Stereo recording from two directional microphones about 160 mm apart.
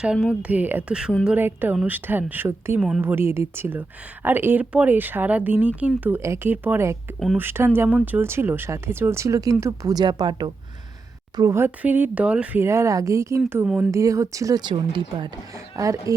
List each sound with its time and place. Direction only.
0.0 s speech: 5° right (ahead or behind); by 10.5 s 30° right (ahead or behind)
11.3 s speech: 20° right (ahead or behind)